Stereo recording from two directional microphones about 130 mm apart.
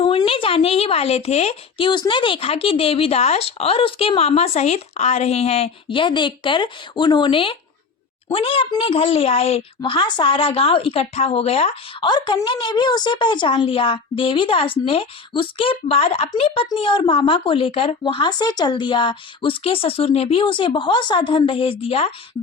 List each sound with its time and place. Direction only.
0.0 s a sound: 40° left (ahead or behind)
1.9 s speech: 35° left (ahead or behind)
16.7 s speech: 35° left (ahead or behind)